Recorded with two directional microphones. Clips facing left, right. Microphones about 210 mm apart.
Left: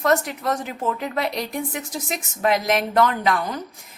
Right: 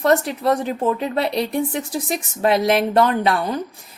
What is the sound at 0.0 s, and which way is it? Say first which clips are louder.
A woman's voice: right 4 dB; 35° right (ahead or behind).